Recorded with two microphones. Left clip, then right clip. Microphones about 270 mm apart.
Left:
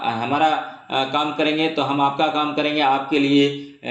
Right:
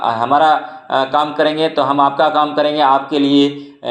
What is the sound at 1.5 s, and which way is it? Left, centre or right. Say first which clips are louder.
A man's voice: right 6 dB; centre.